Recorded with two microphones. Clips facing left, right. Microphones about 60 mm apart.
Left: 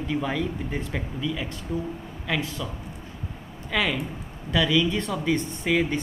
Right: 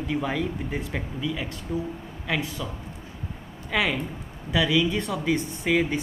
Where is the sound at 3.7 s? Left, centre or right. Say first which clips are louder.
Even; centre.